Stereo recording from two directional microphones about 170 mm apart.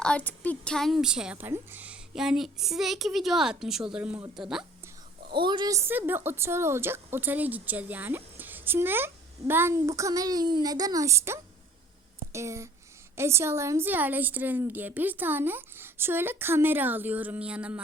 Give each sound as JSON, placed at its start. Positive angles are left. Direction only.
{"t": 0.0, "sound": "a woman's voice", "side_deg": 5}
{"t": 5.3, "sound": "a woman's voice", "side_deg": -25}